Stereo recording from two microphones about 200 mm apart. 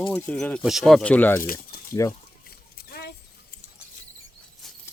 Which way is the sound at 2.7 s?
50° left (ahead or behind).